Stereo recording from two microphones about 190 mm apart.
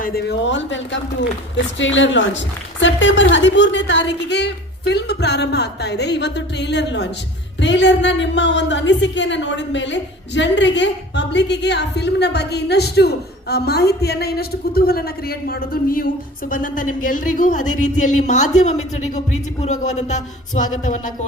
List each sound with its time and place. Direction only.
0.0 s a woman's voice: 55° left (ahead or behind); by 20.7 s 40° left (ahead or behind)